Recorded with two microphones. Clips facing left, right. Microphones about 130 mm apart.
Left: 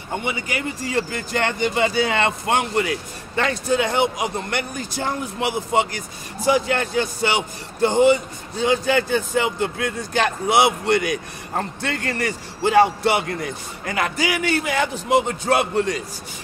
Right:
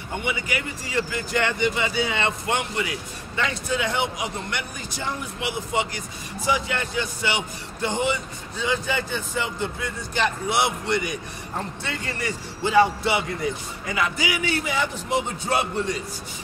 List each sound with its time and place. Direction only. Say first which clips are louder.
0.2 s a man's voice: left 2 dB; 35° left (ahead or behind)
2.0 s speech: left 5 dB; 90° left
2.5 s a man's voice: left 5 dB; 50° left (ahead or behind)
8.8 s speech: left 8 dB; 90° left